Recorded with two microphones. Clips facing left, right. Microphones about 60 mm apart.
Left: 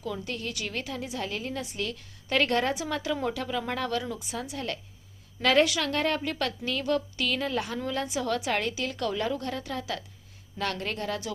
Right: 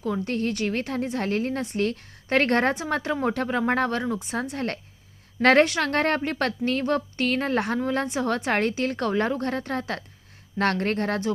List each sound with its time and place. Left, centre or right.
0.0 s a woman's voice: right